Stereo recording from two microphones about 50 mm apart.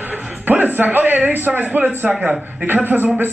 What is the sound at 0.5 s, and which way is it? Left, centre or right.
A man's voice, right.